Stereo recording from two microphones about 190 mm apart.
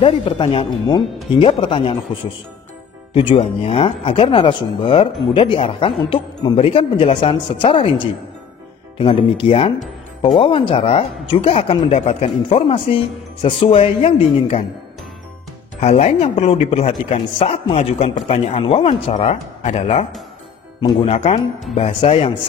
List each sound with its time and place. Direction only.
0.0 s speech: 25° left (ahead or behind)
3.1 s speech: 30° left (ahead or behind)
8.9 s speech: 30° left (ahead or behind)
15.8 s a man's voice: 35° left (ahead or behind)